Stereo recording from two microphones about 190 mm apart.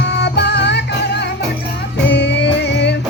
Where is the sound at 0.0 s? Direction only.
65° left (ahead or behind).